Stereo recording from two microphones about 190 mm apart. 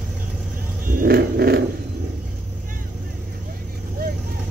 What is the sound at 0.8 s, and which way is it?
Dog, 50° right (ahead or behind).